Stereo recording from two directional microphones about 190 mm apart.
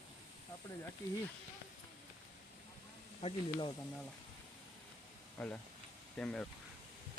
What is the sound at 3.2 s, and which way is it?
Speech, 30° left (ahead or behind).